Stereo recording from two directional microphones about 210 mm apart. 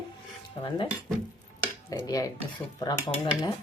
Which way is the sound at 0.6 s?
20° left (ahead or behind).